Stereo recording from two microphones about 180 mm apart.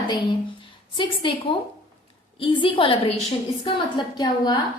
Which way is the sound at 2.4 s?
30° left (ahead or behind).